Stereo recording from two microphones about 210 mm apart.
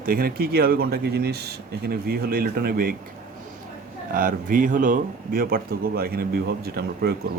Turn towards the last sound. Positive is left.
turn(degrees=-45)  # may be behind; listen again after turning